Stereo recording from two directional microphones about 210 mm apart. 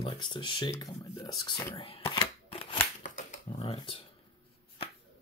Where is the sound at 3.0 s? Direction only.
35° left (ahead or behind).